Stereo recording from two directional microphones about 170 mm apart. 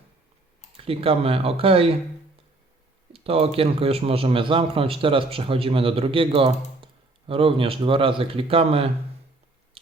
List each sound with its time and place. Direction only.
0.8 s a man's voice: 35° right (ahead or behind)
3.1 s a man's voice: 35° right (ahead or behind)